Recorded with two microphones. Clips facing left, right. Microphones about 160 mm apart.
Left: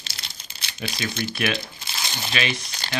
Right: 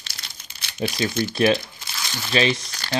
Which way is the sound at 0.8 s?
30° right (ahead or behind).